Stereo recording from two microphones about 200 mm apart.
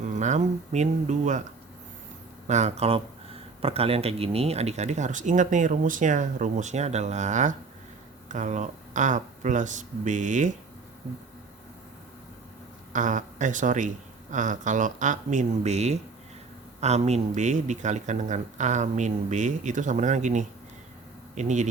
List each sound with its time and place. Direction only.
0.0 s speech: 35° right (ahead or behind)
2.5 s speech: 35° right (ahead or behind)
12.9 s speech: 40° right (ahead or behind)